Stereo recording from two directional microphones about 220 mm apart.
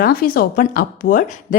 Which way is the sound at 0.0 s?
40° left (ahead or behind).